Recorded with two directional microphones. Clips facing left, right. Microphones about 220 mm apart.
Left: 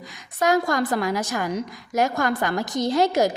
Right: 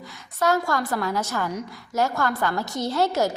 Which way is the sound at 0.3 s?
15° left (ahead or behind).